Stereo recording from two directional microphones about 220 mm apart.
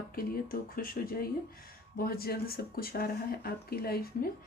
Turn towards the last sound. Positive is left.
turn(degrees=45)  # may be behind; listen again after turning